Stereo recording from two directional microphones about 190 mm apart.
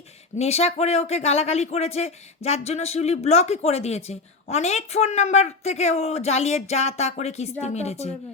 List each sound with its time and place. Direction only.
0.3 s speech: 35° left (ahead or behind)